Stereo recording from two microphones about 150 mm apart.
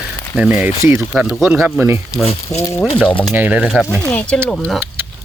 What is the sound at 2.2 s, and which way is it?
Speech, 45° left (ahead or behind).